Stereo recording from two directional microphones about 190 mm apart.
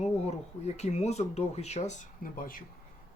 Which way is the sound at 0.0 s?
35° left (ahead or behind).